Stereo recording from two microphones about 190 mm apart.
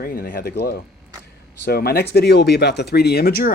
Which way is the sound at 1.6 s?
55° left (ahead or behind).